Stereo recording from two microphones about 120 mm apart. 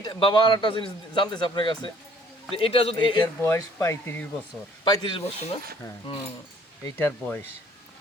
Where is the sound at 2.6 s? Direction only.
55° left (ahead or behind).